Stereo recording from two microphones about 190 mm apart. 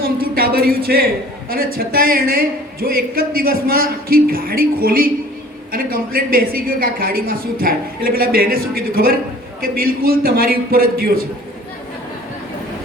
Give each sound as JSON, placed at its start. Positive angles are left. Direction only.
{"t": 0.0, "sound": "a woman's voice", "side_deg": -50}